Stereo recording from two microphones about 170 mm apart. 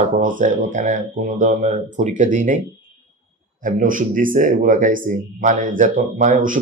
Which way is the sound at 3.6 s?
50° right (ahead or behind).